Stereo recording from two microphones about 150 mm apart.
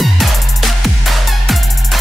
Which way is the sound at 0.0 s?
Centre (ahead or behind).